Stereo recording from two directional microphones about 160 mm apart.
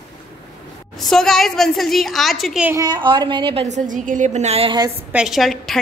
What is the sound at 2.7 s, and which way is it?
A woman's voice, 25° right (ahead or behind).